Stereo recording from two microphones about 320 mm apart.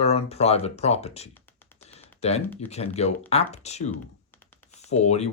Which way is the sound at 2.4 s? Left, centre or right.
Centre.